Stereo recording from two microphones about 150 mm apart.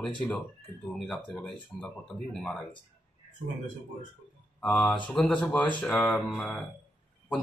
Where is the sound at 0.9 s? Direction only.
Centre (ahead or behind).